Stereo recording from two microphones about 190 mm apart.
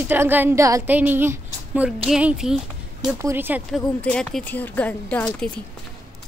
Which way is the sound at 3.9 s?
5° left (ahead or behind).